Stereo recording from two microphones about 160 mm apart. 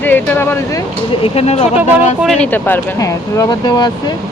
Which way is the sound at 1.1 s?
35° left (ahead or behind).